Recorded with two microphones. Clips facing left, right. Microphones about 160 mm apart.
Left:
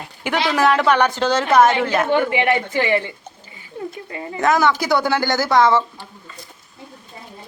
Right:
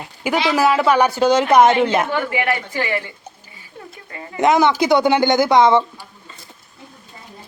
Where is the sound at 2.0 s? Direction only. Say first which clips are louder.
Left 3 dB; 20° left (ahead or behind).